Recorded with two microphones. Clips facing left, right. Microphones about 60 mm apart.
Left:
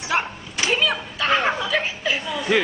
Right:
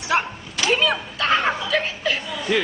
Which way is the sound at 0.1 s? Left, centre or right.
Centre.